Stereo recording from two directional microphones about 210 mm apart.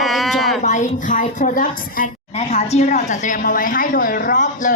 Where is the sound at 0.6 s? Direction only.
35° left (ahead or behind).